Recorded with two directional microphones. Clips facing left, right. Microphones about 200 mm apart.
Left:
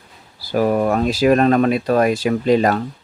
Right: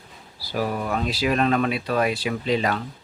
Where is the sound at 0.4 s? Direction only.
50° left (ahead or behind).